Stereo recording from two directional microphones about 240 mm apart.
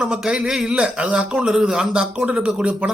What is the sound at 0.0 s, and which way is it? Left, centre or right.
A man's voice, centre.